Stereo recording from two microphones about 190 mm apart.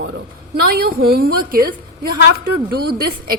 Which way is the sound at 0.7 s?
50° right (ahead or behind).